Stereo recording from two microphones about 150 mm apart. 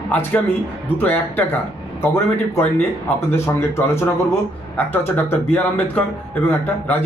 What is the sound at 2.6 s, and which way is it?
Speech, 15° left (ahead or behind).